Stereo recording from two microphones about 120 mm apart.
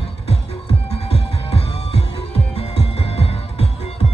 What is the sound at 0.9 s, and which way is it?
Music, 55° left (ahead or behind).